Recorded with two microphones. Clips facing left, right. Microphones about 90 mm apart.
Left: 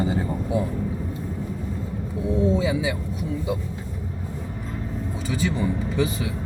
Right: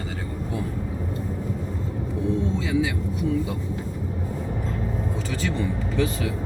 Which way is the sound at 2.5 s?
5° left (ahead or behind).